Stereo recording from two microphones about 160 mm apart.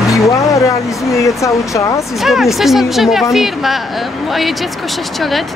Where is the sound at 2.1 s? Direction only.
Centre (ahead or behind).